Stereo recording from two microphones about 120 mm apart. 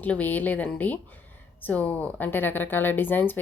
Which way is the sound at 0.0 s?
15° left (ahead or behind).